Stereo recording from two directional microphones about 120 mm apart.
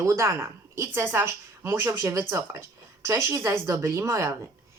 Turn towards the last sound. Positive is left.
turn(degrees=-25)  # may be behind; listen again after turning